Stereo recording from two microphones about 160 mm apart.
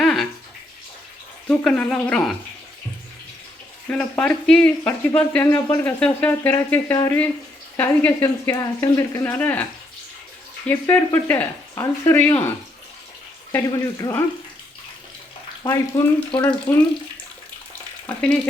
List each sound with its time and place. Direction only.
0.0 s bathtub: centre (ahead or behind)
1.5 s speech: 10° left (ahead or behind)
3.8 s speech: 10° left (ahead or behind)
10.7 s speech: 15° left (ahead or behind)
15.6 s speech: 20° left (ahead or behind)
16.3 s speech: 10° left (ahead or behind)
18.0 s stir: 10° left (ahead or behind)